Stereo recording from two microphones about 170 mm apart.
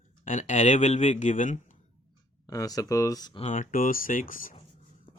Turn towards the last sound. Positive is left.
turn(degrees=55)  # may be behind; listen again after turning